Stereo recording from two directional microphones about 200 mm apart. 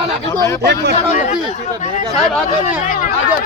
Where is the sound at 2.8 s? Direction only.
40° left (ahead or behind).